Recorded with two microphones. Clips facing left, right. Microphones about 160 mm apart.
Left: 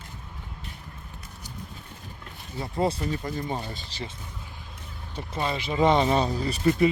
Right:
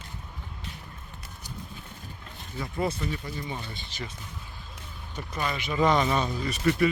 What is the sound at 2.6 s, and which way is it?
Speech, 30° left (ahead or behind).